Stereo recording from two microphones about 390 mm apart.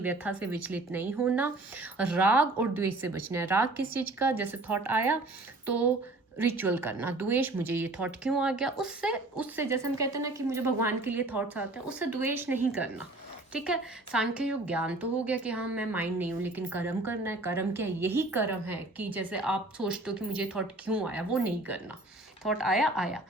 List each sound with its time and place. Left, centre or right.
0.0 s a woman's voice: centre